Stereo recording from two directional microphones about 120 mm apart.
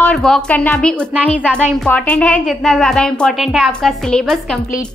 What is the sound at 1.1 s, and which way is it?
Speech, 10° right (ahead or behind).